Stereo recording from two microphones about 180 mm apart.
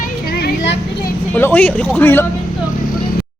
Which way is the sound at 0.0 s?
60° left (ahead or behind).